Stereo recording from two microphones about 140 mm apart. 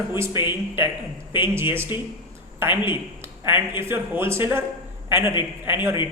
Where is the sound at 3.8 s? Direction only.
15° right (ahead or behind).